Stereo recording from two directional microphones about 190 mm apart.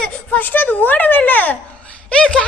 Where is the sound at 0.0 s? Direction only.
10° left (ahead or behind).